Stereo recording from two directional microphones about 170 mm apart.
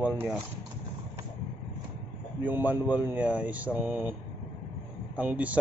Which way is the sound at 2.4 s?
10° right (ahead or behind).